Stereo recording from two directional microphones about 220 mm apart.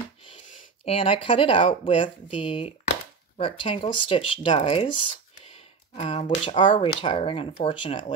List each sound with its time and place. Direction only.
0.8 s speech: 25° left (ahead or behind)